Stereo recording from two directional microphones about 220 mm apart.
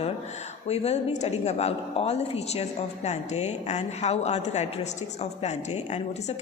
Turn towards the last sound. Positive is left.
turn(degrees=30)  # may be behind; listen again after turning